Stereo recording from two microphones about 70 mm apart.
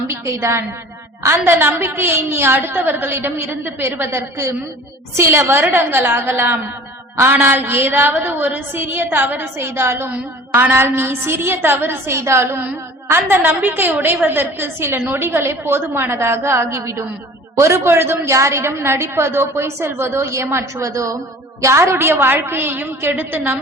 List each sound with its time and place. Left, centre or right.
0.1 s a woman's voice: right
9.6 s a woman's voice: right
18.3 s a woman's voice: right